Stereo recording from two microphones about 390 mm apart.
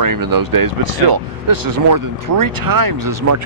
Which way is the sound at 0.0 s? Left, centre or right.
Right.